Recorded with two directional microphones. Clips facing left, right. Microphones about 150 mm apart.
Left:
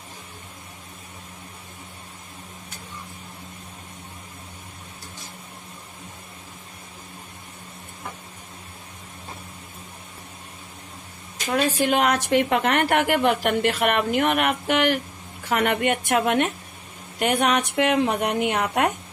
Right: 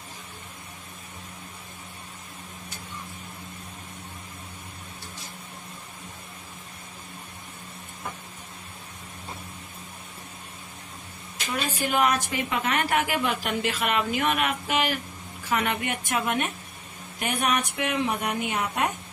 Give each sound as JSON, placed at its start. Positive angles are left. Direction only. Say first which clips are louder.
{"t": 11.5, "sound": "a woman's voice", "louder": "left 6 dB", "side_deg": 80}